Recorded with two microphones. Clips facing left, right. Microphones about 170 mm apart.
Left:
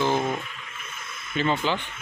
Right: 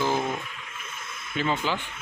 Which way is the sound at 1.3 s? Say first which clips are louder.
Left 2 dB; 5° right (ahead or behind).